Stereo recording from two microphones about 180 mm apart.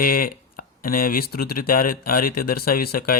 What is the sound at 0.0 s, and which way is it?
Speech, 50° left (ahead or behind).